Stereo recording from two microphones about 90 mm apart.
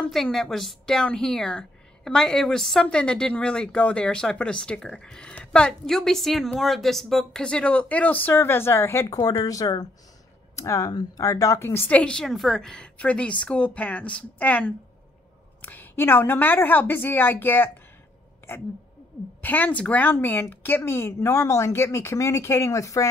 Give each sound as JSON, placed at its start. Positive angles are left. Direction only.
{"t": 0.1, "sound": "a woman's voice", "side_deg": 5}
{"t": 9.4, "sound": "a woman's voice", "side_deg": 40}
{"t": 11.9, "sound": "a woman's voice", "side_deg": 10}
{"t": 19.4, "sound": "speech", "side_deg": 20}